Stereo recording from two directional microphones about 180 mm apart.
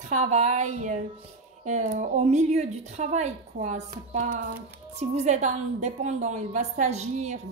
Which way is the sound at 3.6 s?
65° right (ahead or behind).